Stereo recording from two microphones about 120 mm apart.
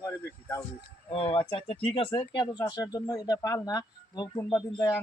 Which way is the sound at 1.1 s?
50° left (ahead or behind).